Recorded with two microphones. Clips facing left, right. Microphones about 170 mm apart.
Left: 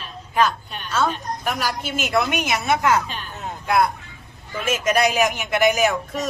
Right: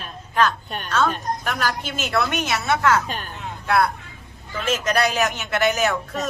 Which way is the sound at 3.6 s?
15° left (ahead or behind).